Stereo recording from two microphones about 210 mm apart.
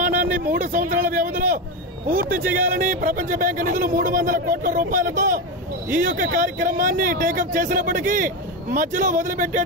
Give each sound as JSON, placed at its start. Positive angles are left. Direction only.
{"t": 0.0, "sound": "a man's voice", "side_deg": -40}